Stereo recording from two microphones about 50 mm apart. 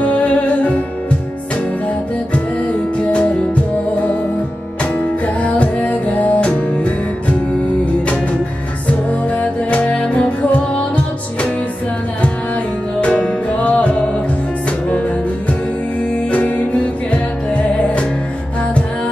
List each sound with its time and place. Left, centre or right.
0.0 s music: left
3.0 s music: left
4.9 s music: left
8.8 s music: left
13.0 s music: left
16.3 s music: left